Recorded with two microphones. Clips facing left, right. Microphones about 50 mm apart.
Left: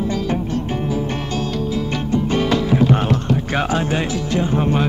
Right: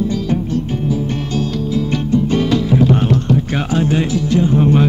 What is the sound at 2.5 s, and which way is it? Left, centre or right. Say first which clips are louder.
Music: right 1 dB; left.